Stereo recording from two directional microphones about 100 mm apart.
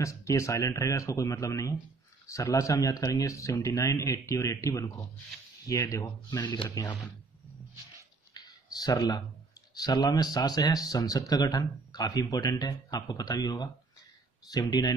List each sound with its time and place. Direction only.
0.0 s speech: 30° left (ahead or behind)
6.3 s speech: 45° left (ahead or behind)
8.3 s a sound: 45° left (ahead or behind)
9.8 s speech: 45° left (ahead or behind)